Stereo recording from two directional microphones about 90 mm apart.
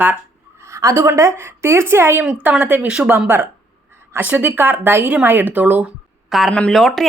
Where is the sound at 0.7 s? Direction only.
35° right (ahead or behind).